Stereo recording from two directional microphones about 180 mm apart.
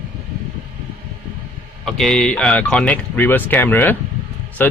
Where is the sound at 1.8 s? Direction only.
Centre (ahead or behind).